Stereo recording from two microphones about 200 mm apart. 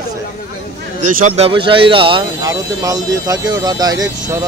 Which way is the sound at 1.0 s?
40° right (ahead or behind).